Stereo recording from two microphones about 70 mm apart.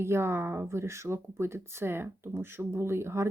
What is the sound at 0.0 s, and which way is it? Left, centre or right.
Speech, right.